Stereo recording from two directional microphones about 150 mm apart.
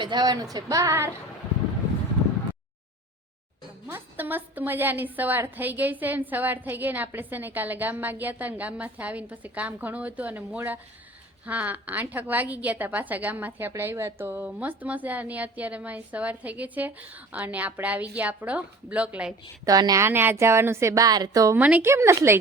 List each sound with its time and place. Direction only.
0.0 s a woman's voice: 30° right (ahead or behind)
3.8 s a woman's voice: 15° right (ahead or behind)
19.6 s a woman's voice: 25° right (ahead or behind)
21.6 s a woman's voice: 10° right (ahead or behind)